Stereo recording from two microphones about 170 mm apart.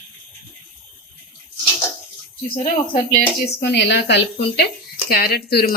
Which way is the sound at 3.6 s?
90° left.